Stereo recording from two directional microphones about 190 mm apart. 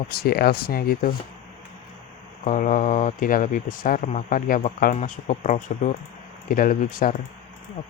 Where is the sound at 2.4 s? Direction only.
40° left (ahead or behind).